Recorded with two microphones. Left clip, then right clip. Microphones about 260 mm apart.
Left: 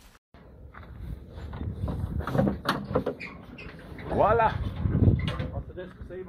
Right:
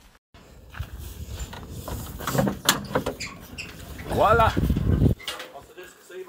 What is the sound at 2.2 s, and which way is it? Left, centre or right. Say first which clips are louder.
Sliding door: right 2 dB; centre.